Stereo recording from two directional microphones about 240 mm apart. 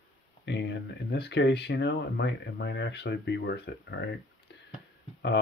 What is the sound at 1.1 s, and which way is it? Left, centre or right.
Speech, left.